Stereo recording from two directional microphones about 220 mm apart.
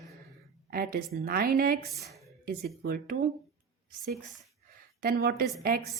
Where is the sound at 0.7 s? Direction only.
45° right (ahead or behind).